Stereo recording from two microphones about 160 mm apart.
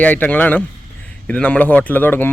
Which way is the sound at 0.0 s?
10° left (ahead or behind).